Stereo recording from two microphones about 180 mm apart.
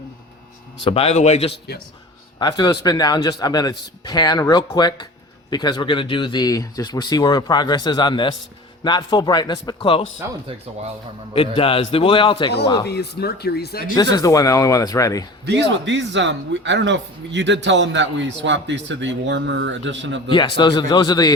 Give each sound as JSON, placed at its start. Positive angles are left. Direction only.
{"t": 0.9, "sound": "speech", "side_deg": 35}
{"t": 2.4, "sound": "speech", "side_deg": 20}
{"t": 10.2, "sound": "speech", "side_deg": -15}
{"t": 11.3, "sound": "speech", "side_deg": 30}
{"t": 12.9, "sound": "speech", "side_deg": 65}
{"t": 13.9, "sound": "speech", "side_deg": 20}
{"t": 15.4, "sound": "speech", "side_deg": -75}
{"t": 20.3, "sound": "speech", "side_deg": 25}